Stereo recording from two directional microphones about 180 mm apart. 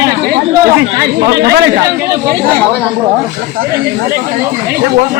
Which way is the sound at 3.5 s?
55° right (ahead or behind).